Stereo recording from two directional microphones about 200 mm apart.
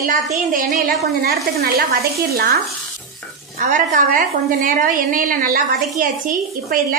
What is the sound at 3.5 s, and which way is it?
A woman's voice, 40° right (ahead or behind).